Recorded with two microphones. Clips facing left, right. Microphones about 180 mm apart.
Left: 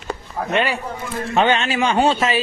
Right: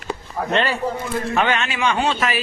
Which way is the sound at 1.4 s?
30° left (ahead or behind).